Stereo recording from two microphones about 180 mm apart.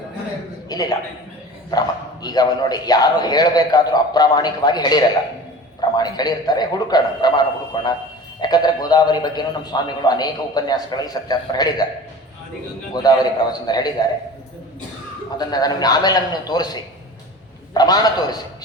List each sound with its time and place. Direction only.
0.7 s a man's voice: 20° left (ahead or behind)
2.2 s a man's voice: 20° left (ahead or behind)
12.9 s a man's voice: 20° left (ahead or behind)
15.4 s a man's voice: 20° left (ahead or behind)
17.7 s a man's voice: 20° left (ahead or behind)